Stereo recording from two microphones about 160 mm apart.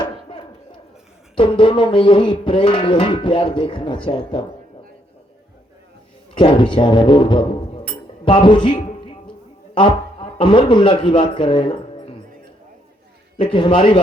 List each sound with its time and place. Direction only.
1.4 s music: 30° left (ahead or behind)
6.3 s speech: 30° left (ahead or behind)
8.0 s music: 30° left (ahead or behind)
9.7 s a man's voice: 30° left (ahead or behind)
13.3 s music: 30° left (ahead or behind)